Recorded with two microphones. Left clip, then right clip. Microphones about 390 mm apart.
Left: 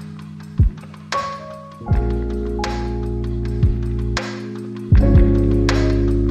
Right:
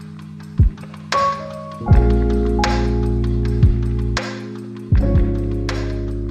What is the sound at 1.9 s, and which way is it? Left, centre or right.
Music, right.